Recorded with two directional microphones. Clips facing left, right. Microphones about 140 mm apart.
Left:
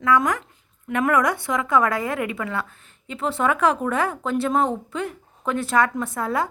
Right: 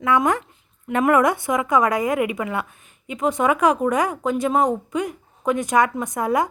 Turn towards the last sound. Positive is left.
turn(degrees=-15)  # may be behind; listen again after turning